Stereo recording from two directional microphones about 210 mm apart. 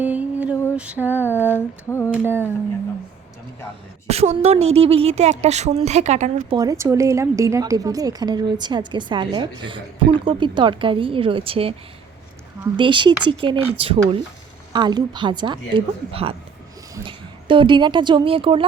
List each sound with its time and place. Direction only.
0.0 s mantra: 5° right (ahead or behind)
0.8 s female singing: 5° right (ahead or behind)
1.2 s a sound: 10° left (ahead or behind)
2.0 s female singing: 10° right (ahead or behind)
4.1 s a woman's voice: 30° right (ahead or behind)
6.6 s a woman's voice: 15° right (ahead or behind)